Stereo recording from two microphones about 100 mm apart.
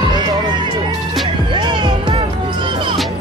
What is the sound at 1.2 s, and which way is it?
Music, 55° right (ahead or behind).